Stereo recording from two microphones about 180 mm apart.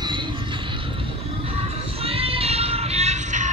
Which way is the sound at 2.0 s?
30° right (ahead or behind).